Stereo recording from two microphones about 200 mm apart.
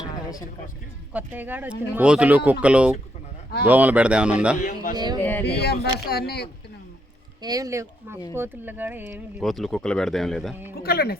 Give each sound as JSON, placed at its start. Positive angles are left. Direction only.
{"t": 1.1, "sound": "speech", "side_deg": -10}
{"t": 4.6, "sound": "speech", "side_deg": 40}
{"t": 5.2, "sound": "speech", "side_deg": 10}
{"t": 5.5, "sound": "speech", "side_deg": 55}
{"t": 7.4, "sound": "speech", "side_deg": -20}
{"t": 10.8, "sound": "speech", "side_deg": 50}